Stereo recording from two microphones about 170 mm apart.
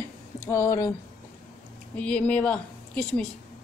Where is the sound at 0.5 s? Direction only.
20° left (ahead or behind).